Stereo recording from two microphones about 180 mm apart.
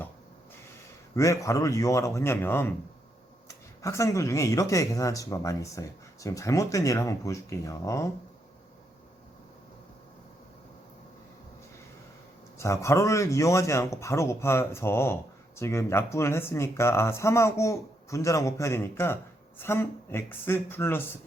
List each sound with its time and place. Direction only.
1.1 s speech: 15° left (ahead or behind)
3.8 s speech: 15° left (ahead or behind)
12.5 s speech: 15° left (ahead or behind)